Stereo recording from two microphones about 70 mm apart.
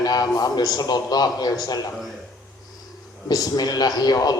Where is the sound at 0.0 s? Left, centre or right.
Left.